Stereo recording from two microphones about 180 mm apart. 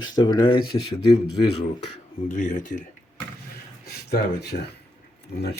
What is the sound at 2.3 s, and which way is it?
Speech, 45° left (ahead or behind).